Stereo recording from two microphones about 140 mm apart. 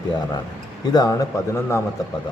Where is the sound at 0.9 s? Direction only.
30° left (ahead or behind).